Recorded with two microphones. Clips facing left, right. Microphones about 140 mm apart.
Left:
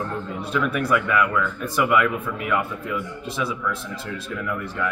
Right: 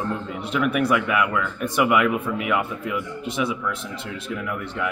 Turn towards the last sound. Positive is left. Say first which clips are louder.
# even
turn(degrees=-20)  # may be behind; listen again after turning